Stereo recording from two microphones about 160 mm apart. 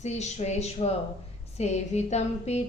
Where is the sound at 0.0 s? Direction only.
45° left (ahead or behind).